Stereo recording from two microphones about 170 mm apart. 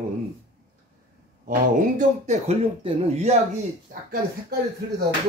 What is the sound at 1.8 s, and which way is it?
Speech, 45° right (ahead or behind).